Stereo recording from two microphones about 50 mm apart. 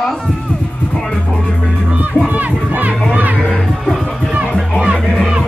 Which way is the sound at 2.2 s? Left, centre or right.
Right.